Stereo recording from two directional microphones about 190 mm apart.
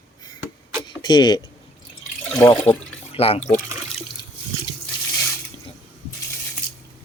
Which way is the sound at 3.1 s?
30° left (ahead or behind).